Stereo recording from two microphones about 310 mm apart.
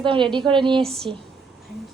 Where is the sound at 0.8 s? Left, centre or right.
Centre.